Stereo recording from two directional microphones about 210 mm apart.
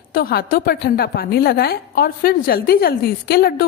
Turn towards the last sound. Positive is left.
turn(degrees=45)  # may be behind; listen again after turning